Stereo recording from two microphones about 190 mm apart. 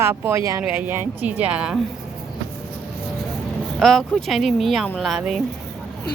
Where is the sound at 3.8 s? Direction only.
Centre (ahead or behind).